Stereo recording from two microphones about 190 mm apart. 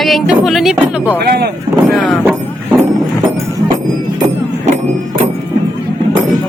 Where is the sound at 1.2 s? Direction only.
55° right (ahead or behind).